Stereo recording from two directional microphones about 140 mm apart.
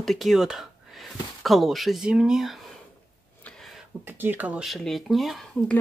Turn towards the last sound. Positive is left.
turn(degrees=0)  # may be behind; listen again after turning